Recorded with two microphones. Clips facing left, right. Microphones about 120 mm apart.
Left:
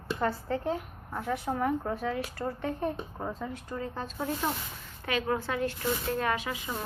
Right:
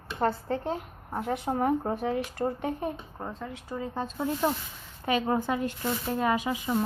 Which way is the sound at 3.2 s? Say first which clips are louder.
Left 2 dB; centre (ahead or behind).